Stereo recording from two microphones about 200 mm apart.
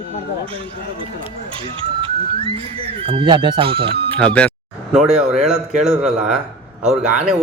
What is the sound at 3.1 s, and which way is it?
Speech, 25° right (ahead or behind).